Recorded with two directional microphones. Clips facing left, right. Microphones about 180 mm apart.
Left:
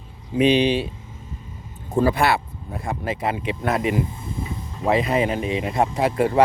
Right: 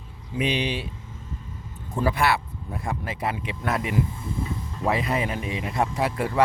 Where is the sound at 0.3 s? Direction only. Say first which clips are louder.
Left 9 dB; 25° left (ahead or behind).